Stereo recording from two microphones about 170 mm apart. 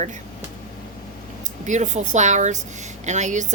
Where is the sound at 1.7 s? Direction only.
45° right (ahead or behind).